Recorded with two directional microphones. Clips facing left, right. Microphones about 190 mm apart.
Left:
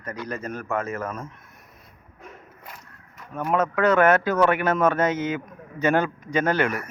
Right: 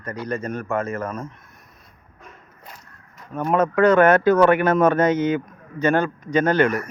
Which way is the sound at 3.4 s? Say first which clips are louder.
Right 4 dB; 35° right (ahead or behind).